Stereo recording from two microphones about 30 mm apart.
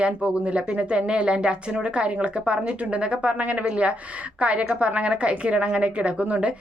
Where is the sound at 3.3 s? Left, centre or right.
Right.